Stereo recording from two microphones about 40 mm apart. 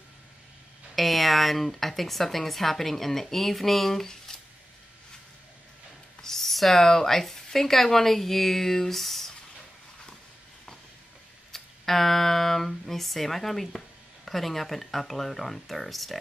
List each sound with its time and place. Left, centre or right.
0.9 s speech: centre
4.3 s a sound: centre
6.2 s speech: centre
11.5 s speech: centre